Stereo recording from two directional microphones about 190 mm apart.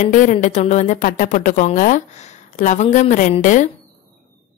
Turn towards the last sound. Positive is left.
turn(degrees=40)  # may be behind; listen again after turning